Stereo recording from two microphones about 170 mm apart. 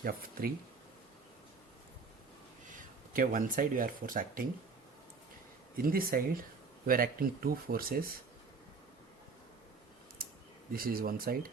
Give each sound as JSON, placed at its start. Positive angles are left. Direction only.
{"t": 0.0, "sound": "speech", "side_deg": -60}
{"t": 2.6, "sound": "speech", "side_deg": -55}
{"t": 5.7, "sound": "speech", "side_deg": -60}
{"t": 10.2, "sound": "a sound", "side_deg": -60}
{"t": 10.7, "sound": "speech", "side_deg": -60}